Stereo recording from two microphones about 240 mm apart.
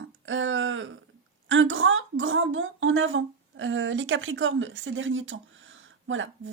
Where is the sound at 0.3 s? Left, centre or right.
Right.